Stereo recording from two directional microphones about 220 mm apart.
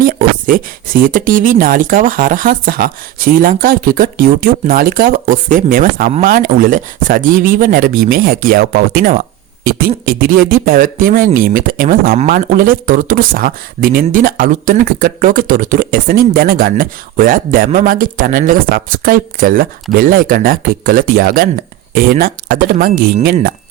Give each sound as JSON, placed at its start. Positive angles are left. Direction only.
{"t": 0.0, "sound": "speech", "side_deg": -40}